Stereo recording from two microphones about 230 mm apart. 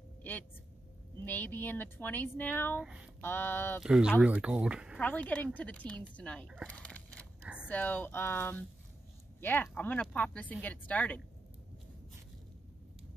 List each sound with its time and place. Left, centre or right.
0.2 s a sound: centre
1.2 s speech: centre
2.8 s speech: centre
3.2 s speech: centre
3.8 s speech: centre
5.0 s speech: centre
6.5 s a sound: centre
7.6 s speech: centre